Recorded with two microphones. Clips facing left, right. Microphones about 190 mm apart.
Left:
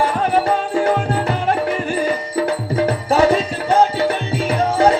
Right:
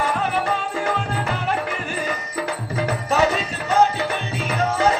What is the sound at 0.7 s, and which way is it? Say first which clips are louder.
Music: left 8 dB; 30° left (ahead or behind).